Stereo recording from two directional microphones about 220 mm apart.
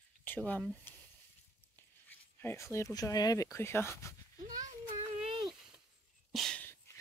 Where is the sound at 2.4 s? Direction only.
10° left (ahead or behind).